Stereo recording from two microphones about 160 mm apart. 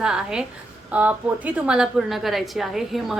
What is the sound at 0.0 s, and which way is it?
A woman's voice, 5° right (ahead or behind).